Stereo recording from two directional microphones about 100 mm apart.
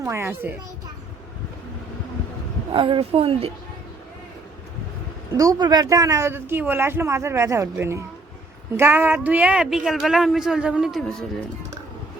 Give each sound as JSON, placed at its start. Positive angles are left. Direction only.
{"t": 0.0, "sound": "speech", "side_deg": -25}
{"t": 2.7, "sound": "speech", "side_deg": -60}
{"t": 5.4, "sound": "speech", "side_deg": -40}